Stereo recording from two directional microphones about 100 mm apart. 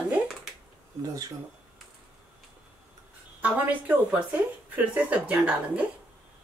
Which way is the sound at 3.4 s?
10° right (ahead or behind).